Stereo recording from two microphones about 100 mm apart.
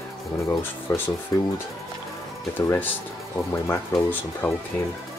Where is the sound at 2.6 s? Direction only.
20° left (ahead or behind).